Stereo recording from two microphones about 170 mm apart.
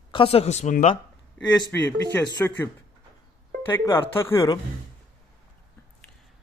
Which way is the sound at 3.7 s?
15° left (ahead or behind).